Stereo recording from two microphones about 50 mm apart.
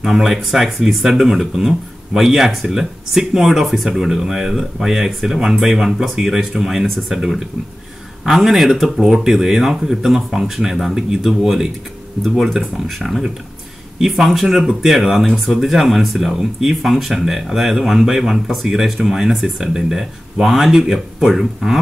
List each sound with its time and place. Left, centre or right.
0.0 s speech: centre